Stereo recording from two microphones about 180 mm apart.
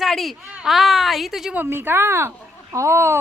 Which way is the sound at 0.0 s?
Centre (ahead or behind).